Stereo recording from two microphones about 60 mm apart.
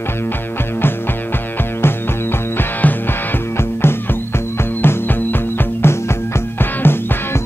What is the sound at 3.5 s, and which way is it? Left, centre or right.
Music, left.